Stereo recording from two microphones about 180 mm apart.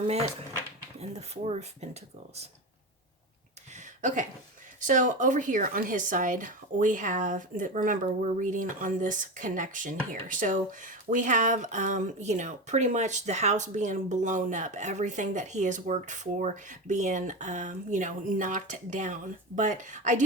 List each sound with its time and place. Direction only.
0.0 s speech: 35° right (ahead or behind)
4.0 s speech: 45° right (ahead or behind)